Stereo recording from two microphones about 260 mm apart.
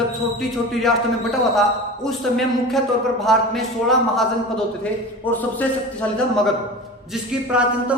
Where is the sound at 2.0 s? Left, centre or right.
Centre.